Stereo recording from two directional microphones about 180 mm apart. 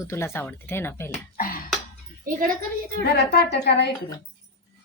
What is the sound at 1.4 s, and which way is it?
Cough, 50° left (ahead or behind).